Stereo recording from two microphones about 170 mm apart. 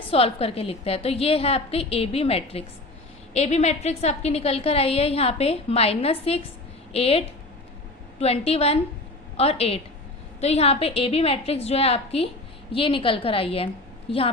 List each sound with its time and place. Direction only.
0.1 s a woman's voice: 35° left (ahead or behind)